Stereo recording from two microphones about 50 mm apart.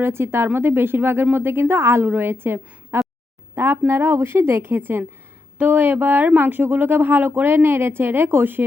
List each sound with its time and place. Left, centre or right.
0.0 s speech: right
2.0 s a woman's voice: right
5.5 s speech: right